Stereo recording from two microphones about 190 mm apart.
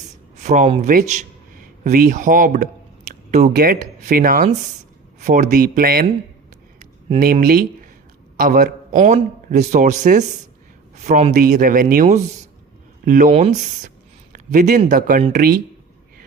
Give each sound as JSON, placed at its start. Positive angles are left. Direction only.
{"t": 0.4, "sound": "speech", "side_deg": -40}
{"t": 7.2, "sound": "speech", "side_deg": -50}